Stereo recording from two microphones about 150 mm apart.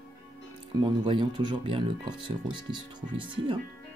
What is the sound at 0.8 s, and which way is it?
Speech, 35° right (ahead or behind).